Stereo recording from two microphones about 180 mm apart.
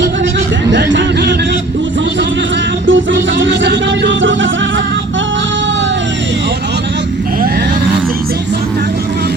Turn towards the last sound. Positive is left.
turn(degrees=-55)  # may be behind; listen again after turning